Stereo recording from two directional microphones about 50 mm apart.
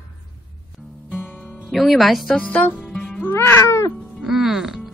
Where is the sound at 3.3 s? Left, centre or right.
Left.